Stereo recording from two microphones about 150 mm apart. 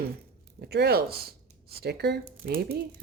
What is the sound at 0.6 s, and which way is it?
Speech, 90° right.